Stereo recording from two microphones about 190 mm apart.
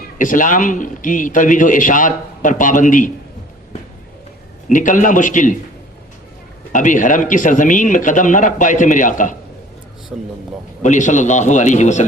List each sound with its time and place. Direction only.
0.2 s a man's voice: 45° left (ahead or behind)
4.7 s a man's voice: 45° left (ahead or behind)
6.7 s a man's voice: 40° left (ahead or behind)
10.1 s speech: 5° right (ahead or behind)
10.8 s speech: 40° left (ahead or behind)